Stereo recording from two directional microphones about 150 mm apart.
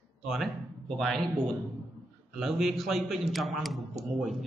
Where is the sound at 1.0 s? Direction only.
Centre (ahead or behind).